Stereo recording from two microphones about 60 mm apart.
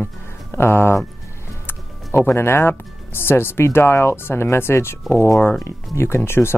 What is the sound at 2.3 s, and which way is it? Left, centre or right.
Speech, left.